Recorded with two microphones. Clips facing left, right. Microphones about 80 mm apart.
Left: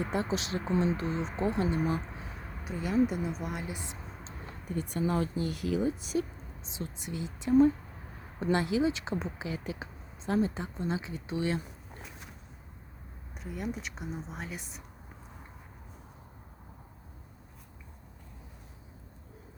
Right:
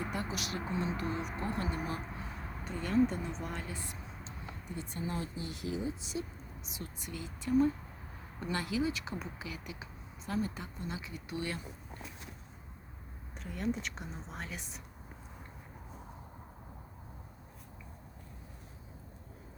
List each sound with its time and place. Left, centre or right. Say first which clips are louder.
0.0 s speech: left 6 dB; left
2.6 s a woman's voice: left 2 dB; centre
4.2 s a sound: left 1 dB; left
4.8 s speech: left 9 dB; left
6.6 s speech: left 6 dB; left
13.3 s speech: right 1 dB; centre